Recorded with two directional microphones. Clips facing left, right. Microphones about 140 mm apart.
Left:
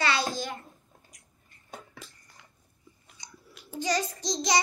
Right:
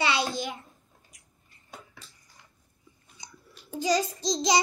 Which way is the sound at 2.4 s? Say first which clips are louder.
Left 1 dB; 90° left.